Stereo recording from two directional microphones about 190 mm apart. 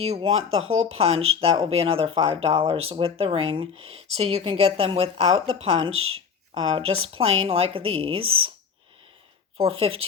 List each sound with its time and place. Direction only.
0.0 s speech: 30° right (ahead or behind)
5.9 s speech: 90° right
6.5 s speech: 30° right (ahead or behind)
8.2 s speech: 90° right
9.6 s speech: 30° right (ahead or behind)